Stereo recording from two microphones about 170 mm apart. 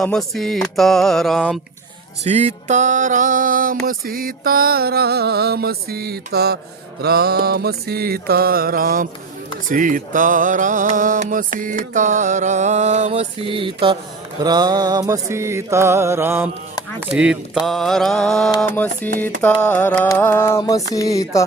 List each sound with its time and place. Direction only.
0.0 s mantra: 5° left (ahead or behind)
2.2 s mantra: 40° right (ahead or behind)
14.3 s music: 25° right (ahead or behind)
17.2 s mantra: 5° right (ahead or behind)
18.7 s music: 10° left (ahead or behind)